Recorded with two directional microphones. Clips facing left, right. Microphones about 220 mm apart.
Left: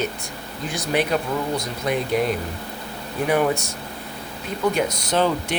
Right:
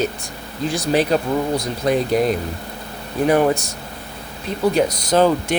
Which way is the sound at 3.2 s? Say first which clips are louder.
Right 4 dB; 35° right (ahead or behind).